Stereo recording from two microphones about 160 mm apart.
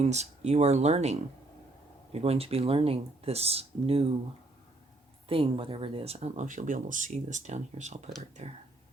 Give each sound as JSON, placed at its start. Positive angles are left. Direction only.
{"t": 0.0, "sound": "speech", "side_deg": -45}
{"t": 5.3, "sound": "speech", "side_deg": -35}